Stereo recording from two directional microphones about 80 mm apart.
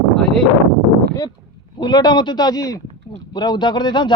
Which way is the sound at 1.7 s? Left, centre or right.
Left.